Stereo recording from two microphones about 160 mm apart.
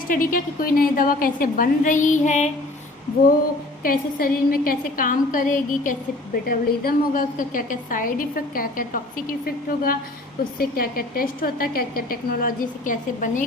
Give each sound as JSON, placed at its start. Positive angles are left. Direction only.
{"t": 0.1, "sound": "a woman's voice", "side_deg": 60}
{"t": 3.8, "sound": "a woman's voice", "side_deg": 65}